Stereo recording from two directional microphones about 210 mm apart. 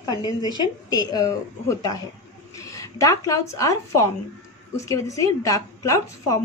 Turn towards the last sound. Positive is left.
turn(degrees=15)  # may be behind; listen again after turning